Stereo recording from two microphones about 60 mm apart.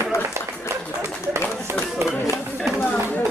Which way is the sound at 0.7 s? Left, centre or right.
Right.